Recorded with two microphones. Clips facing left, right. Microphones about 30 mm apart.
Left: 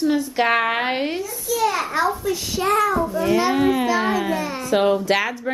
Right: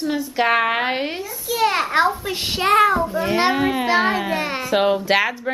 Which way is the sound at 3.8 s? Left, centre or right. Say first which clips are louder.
Right 2 dB; right.